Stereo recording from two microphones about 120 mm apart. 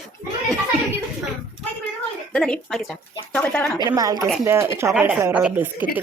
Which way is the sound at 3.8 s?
30° right (ahead or behind).